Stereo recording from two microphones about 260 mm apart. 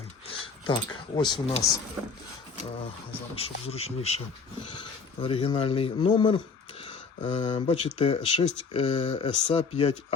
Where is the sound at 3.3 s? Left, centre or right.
Left.